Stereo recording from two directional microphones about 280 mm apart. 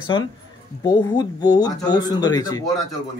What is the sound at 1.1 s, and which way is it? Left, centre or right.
Speech, centre.